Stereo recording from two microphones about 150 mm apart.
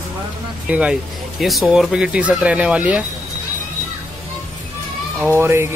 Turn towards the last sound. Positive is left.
turn(degrees=-15)  # may be behind; listen again after turning